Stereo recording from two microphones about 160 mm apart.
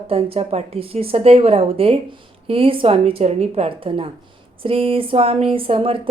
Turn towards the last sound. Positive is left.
turn(degrees=-35)  # may be behind; listen again after turning